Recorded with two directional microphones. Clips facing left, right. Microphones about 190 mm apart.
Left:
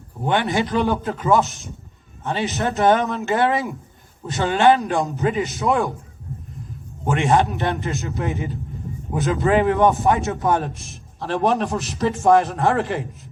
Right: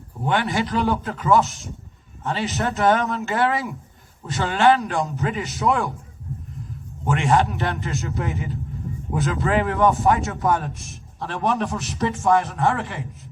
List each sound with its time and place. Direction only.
0.3 s a man's voice: 20° left (ahead or behind)
7.2 s a man's voice: 20° left (ahead or behind); by 13.0 s 35° left (ahead or behind)